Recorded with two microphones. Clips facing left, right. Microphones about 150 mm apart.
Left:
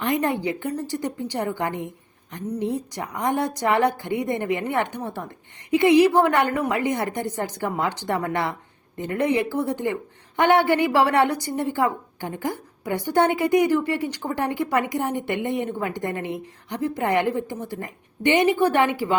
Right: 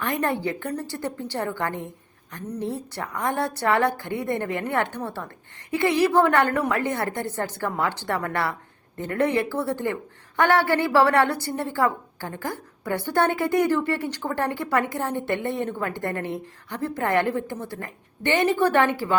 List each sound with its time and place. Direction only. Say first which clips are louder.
0.0 s a woman's voice: left 2 dB; 20° left (ahead or behind)